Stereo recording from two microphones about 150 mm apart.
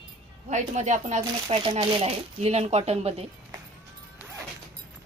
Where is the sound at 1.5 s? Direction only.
40° right (ahead or behind).